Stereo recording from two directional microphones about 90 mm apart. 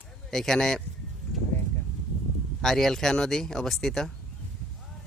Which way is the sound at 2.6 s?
5° left (ahead or behind).